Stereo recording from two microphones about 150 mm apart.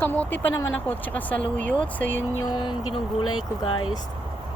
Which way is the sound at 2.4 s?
30° left (ahead or behind).